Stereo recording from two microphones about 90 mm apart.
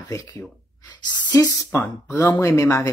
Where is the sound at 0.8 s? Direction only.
55° left (ahead or behind).